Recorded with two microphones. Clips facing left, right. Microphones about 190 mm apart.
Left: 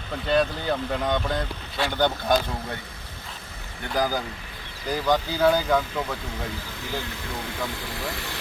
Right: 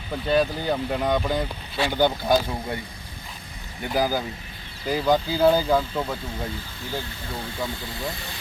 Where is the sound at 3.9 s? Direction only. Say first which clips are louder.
Right 2 dB; 5° right (ahead or behind).